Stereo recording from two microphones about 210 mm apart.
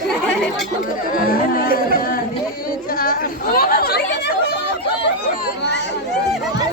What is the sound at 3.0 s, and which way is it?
Chatter, 45° left (ahead or behind).